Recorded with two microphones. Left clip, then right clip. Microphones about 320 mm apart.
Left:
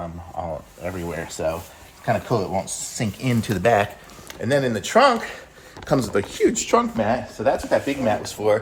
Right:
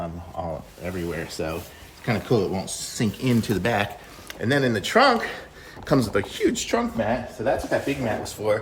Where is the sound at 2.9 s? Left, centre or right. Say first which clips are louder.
Right 2 dB; centre.